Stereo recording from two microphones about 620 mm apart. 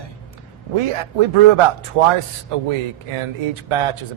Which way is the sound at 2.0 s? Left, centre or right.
Right.